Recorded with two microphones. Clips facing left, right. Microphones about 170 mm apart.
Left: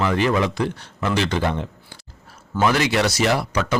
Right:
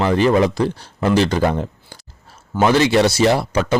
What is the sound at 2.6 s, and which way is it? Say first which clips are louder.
Speech: right 5 dB; 30° right (ahead or behind).